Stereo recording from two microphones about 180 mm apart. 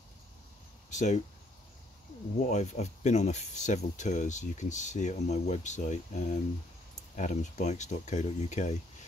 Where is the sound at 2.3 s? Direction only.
40° left (ahead or behind).